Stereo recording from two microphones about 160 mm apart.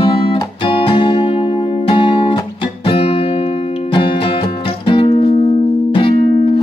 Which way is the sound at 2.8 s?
30° left (ahead or behind).